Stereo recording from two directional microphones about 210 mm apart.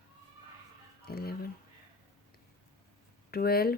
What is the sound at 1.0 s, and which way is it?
Speech, 45° left (ahead or behind).